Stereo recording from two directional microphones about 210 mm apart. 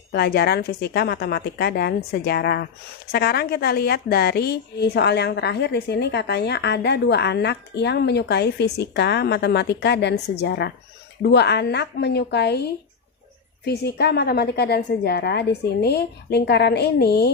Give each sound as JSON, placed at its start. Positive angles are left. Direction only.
{"t": 0.1, "sound": "a woman's voice", "side_deg": 50}